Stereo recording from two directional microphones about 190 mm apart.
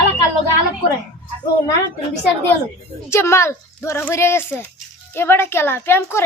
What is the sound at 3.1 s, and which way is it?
A woman's voice, 15° left (ahead or behind).